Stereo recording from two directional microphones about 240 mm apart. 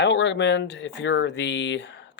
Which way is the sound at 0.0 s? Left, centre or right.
Left.